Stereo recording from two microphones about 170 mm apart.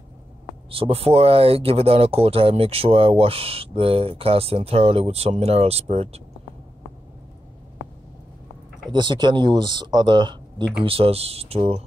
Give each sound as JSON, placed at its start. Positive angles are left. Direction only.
{"t": 0.7, "sound": "speech", "side_deg": -35}
{"t": 8.9, "sound": "speech", "side_deg": -25}